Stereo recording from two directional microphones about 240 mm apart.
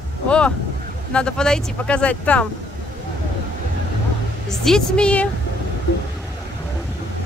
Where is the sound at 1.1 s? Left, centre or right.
Centre.